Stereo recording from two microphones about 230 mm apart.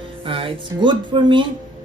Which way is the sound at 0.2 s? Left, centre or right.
Right.